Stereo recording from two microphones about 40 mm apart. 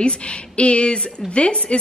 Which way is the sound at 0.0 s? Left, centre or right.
Left.